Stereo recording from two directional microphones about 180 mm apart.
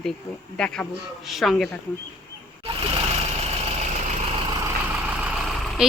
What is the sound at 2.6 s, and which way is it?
Vehicle, 30° right (ahead or behind).